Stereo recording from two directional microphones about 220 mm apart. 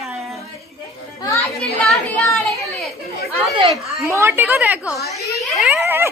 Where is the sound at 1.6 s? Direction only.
Centre (ahead or behind).